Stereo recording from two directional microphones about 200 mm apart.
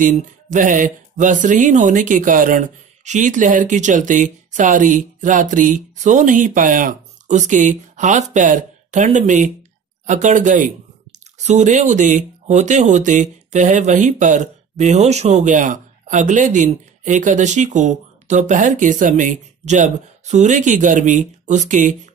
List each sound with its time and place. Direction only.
0.0 s speech: 40° right (ahead or behind)